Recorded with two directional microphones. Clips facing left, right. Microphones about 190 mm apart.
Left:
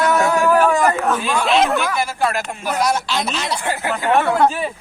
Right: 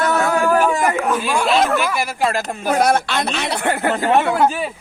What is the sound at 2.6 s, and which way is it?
Speech, 55° right (ahead or behind).